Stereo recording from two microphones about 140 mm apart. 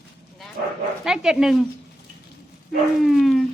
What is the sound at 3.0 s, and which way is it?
Speech, centre (ahead or behind).